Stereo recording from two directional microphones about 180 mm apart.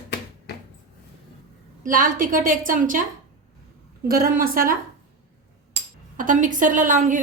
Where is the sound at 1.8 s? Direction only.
50° right (ahead or behind).